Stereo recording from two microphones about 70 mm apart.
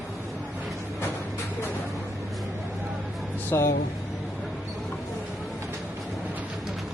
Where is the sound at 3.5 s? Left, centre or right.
Left.